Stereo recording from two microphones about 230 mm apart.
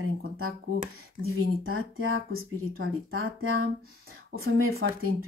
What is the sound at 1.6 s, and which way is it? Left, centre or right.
Speech, right.